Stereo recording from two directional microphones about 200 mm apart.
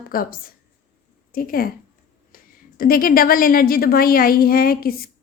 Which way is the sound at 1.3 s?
45° left (ahead or behind).